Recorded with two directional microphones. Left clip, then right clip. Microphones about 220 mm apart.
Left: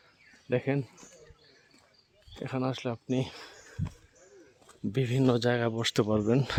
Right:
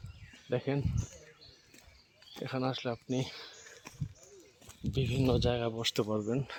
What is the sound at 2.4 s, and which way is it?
Speech, 35° left (ahead or behind).